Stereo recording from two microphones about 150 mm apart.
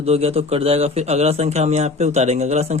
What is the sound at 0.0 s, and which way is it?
A man's voice, 40° right (ahead or behind).